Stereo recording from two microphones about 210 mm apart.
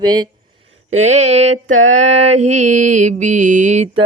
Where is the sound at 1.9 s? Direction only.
30° right (ahead or behind).